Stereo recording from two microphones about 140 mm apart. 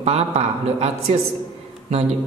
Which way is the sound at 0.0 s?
45° right (ahead or behind).